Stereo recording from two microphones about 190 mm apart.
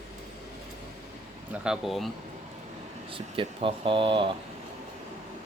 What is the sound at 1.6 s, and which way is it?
Speech, centre (ahead or behind).